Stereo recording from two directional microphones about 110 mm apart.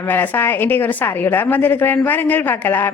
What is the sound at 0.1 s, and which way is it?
A woman's voice, 20° left (ahead or behind).